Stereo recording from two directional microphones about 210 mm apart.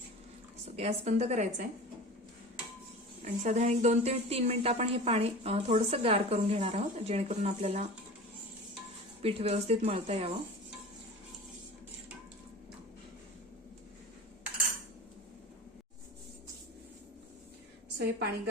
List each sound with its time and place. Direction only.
0.6 s a woman's voice: 30° right (ahead or behind)
3.4 s a woman's voice: 30° right (ahead or behind)
9.2 s a woman's voice: 30° right (ahead or behind)
17.9 s a woman's voice: 50° right (ahead or behind)